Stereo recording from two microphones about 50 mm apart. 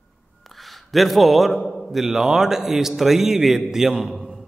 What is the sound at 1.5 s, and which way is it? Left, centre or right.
Speech, centre.